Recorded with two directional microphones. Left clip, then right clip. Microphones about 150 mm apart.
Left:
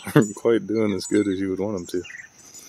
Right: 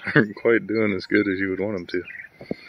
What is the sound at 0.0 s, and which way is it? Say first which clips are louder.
Speech: even; 20° left (ahead or behind).